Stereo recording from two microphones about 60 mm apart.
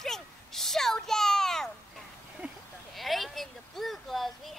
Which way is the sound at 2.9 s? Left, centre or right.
Centre.